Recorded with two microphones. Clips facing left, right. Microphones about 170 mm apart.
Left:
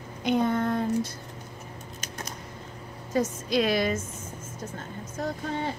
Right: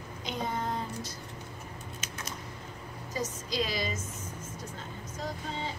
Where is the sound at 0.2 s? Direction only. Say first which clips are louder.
Left 10 dB; 60° left (ahead or behind).